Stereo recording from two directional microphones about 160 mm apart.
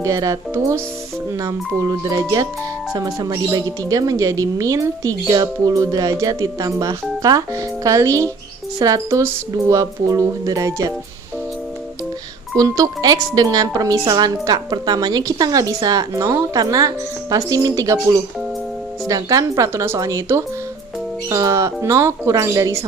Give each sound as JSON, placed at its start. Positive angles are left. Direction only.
{"t": 0.0, "sound": "speech", "side_deg": -20}
{"t": 12.5, "sound": "speech", "side_deg": -20}